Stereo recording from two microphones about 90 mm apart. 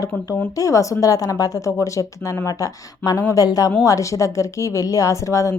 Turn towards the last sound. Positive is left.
turn(degrees=35)  # may be behind; listen again after turning